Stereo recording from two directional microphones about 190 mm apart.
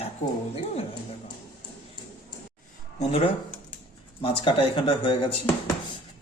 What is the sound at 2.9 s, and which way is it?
A woman's voice, 30° left (ahead or behind).